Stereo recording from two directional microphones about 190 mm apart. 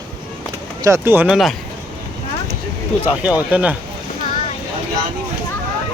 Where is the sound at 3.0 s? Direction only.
5° right (ahead or behind).